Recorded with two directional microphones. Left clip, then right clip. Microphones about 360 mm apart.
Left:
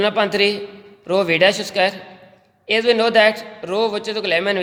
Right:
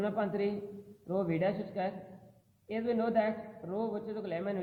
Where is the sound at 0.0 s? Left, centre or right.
Left.